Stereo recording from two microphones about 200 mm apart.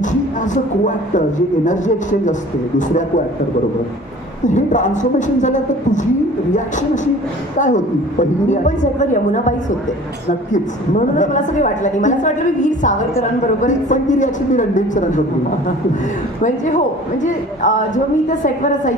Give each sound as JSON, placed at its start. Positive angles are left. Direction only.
{"t": 0.8, "sound": "a man's voice", "side_deg": 40}
{"t": 4.6, "sound": "a man's voice", "side_deg": 40}
{"t": 7.6, "sound": "a man's voice", "side_deg": 40}
{"t": 11.1, "sound": "a man's voice", "side_deg": 40}
{"t": 16.4, "sound": "a man's voice", "side_deg": 35}